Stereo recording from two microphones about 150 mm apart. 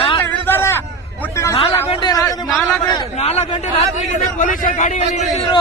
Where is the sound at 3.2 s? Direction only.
45° left (ahead or behind).